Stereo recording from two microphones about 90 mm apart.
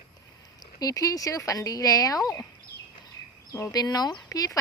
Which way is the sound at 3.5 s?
40° left (ahead or behind).